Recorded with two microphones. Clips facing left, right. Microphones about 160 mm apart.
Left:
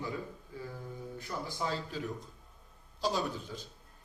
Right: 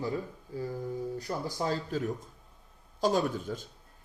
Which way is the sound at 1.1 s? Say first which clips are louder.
Right 5 dB; 40° right (ahead or behind).